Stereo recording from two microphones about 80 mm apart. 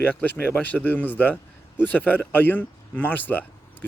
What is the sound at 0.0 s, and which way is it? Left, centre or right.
Speech, left.